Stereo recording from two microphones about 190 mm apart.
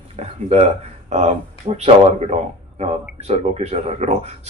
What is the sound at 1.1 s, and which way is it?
Speech, 35° right (ahead or behind).